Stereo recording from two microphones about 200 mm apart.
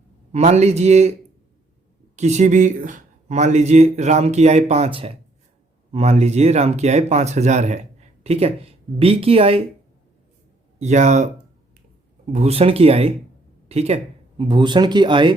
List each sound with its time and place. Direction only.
0.3 s speech: 35° right (ahead or behind)
2.1 s speech: 35° right (ahead or behind)
10.8 s speech: 35° right (ahead or behind)
12.3 s speech: 30° right (ahead or behind)